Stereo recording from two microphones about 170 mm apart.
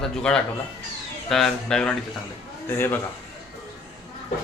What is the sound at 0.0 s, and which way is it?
A man's voice, 5° left (ahead or behind).